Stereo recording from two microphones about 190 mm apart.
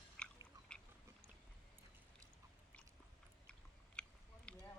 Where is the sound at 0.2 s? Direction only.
5° left (ahead or behind).